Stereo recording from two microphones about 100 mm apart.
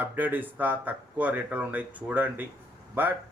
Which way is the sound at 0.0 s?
20° right (ahead or behind).